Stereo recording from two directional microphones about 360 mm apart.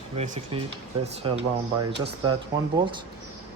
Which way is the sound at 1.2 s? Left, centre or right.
Centre.